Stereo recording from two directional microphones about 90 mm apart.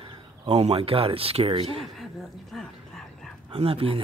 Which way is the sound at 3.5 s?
90° right.